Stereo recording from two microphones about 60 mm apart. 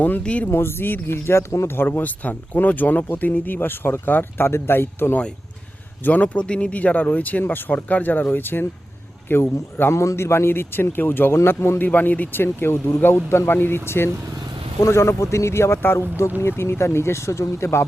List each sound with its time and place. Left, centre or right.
0.2 s speech: left
0.4 s speech: left
6.1 s speech: left
9.9 s speech: left
11.3 s speech: left
11.9 s speech: left